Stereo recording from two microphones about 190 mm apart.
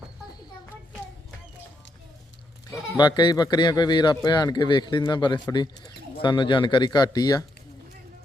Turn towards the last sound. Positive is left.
turn(degrees=20)  # may be behind; listen again after turning